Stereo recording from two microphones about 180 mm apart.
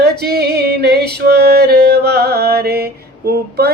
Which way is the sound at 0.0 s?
60° right (ahead or behind).